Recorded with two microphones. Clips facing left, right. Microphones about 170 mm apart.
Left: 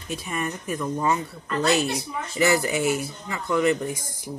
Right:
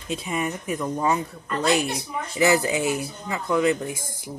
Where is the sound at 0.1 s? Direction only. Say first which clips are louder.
Right 2 dB; 15° right (ahead or behind).